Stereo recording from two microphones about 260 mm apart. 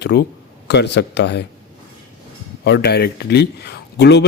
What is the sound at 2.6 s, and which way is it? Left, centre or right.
A man's voice, left.